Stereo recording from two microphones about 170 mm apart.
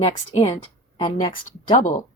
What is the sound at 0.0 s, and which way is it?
Speech, 35° left (ahead or behind).